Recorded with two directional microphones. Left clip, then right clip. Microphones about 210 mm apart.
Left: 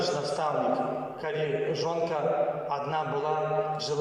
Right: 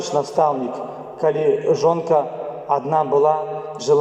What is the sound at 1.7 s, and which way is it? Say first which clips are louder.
A man's voice: right 12 dB; 50° right (ahead or behind).